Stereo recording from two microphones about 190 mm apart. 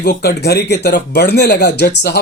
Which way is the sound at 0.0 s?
55° left (ahead or behind).